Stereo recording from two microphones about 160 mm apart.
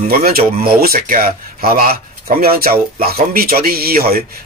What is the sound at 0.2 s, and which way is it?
A man's voice, 65° right (ahead or behind).